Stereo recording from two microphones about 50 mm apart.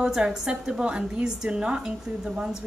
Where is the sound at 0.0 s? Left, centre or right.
Centre.